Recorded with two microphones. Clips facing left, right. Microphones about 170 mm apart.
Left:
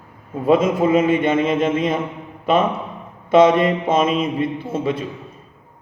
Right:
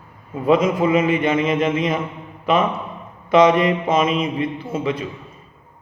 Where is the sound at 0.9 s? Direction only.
30° left (ahead or behind).